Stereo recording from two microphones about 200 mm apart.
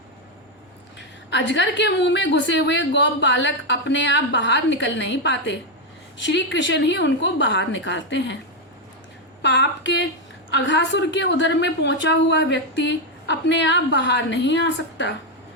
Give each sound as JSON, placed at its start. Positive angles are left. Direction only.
{"t": 0.9, "sound": "a woman's voice", "side_deg": 60}
{"t": 9.4, "sound": "a woman's voice", "side_deg": 60}